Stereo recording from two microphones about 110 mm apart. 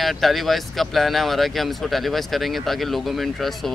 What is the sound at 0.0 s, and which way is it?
Speech, centre (ahead or behind).